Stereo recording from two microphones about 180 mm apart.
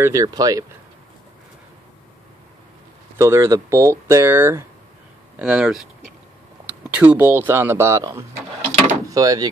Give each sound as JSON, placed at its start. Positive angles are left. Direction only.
{"t": 0.0, "sound": "speech", "side_deg": -20}
{"t": 3.2, "sound": "speech", "side_deg": -15}